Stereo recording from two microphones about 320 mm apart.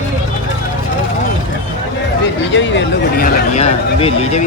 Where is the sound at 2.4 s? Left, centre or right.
Left.